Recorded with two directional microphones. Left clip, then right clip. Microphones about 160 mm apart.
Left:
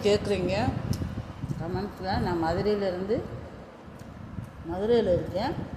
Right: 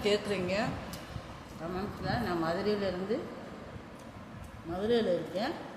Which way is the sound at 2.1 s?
25° left (ahead or behind).